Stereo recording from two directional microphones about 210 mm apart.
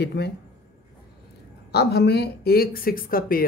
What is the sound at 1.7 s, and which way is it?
Speech, 50° left (ahead or behind).